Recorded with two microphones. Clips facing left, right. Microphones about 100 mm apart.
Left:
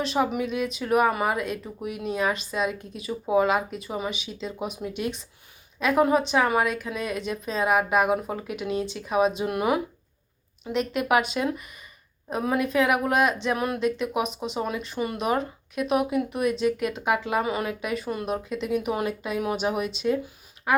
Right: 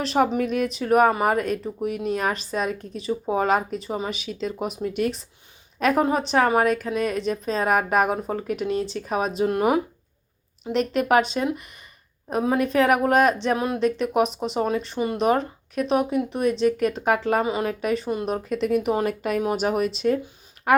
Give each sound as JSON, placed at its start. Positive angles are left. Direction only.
{"t": 0.3, "sound": "speech", "side_deg": -45}
{"t": 3.8, "sound": "speech", "side_deg": -30}
{"t": 4.1, "sound": "speech", "side_deg": -50}
{"t": 5.8, "sound": "speech", "side_deg": -35}
{"t": 12.5, "sound": "speech", "side_deg": -40}
{"t": 13.8, "sound": "speech", "side_deg": -40}
{"t": 17.4, "sound": "speech", "side_deg": -25}
{"t": 17.7, "sound": "speech", "side_deg": -35}
{"t": 18.3, "sound": "speech", "side_deg": -50}
{"t": 19.0, "sound": "speech", "side_deg": -55}
{"t": 20.7, "sound": "speech", "side_deg": -60}